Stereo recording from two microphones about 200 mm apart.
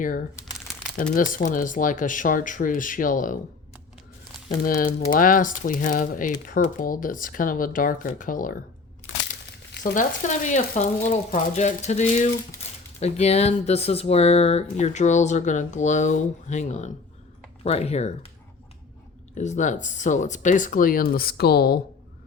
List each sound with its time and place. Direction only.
1.1 s speech: 40° left (ahead or behind)
4.4 s speech: 45° left (ahead or behind)
9.8 s speech: 40° left (ahead or behind)
19.3 s speech: 35° left (ahead or behind)